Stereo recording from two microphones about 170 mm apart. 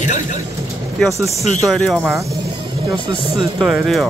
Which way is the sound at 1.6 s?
Centre (ahead or behind).